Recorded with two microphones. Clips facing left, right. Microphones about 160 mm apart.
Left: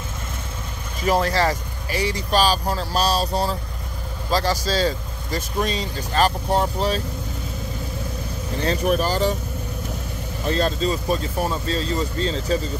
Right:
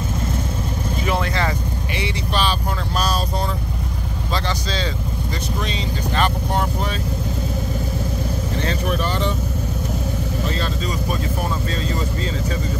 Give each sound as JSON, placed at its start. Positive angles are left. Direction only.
{"t": 1.0, "sound": "vehicle", "side_deg": 35}
{"t": 2.0, "sound": "speech", "side_deg": 40}
{"t": 8.6, "sound": "speech", "side_deg": 40}
{"t": 10.6, "sound": "speech", "side_deg": 30}